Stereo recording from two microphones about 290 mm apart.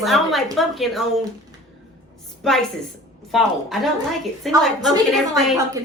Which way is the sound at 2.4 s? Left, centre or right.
Centre.